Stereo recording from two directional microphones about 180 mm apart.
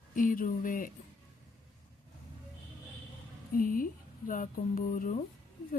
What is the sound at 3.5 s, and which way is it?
Speech, 50° left (ahead or behind).